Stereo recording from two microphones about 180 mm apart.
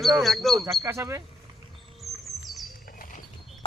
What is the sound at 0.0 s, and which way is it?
Speech, centre (ahead or behind).